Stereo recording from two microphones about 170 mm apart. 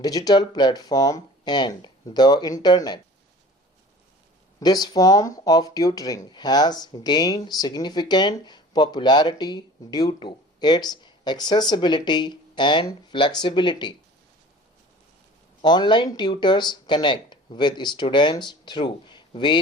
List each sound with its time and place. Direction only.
0.0 s speech: 20° left (ahead or behind)
4.6 s speech: 25° left (ahead or behind)
15.6 s speech: 25° left (ahead or behind)